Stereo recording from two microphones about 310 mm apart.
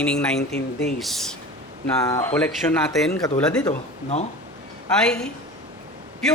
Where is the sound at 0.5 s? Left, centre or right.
Left.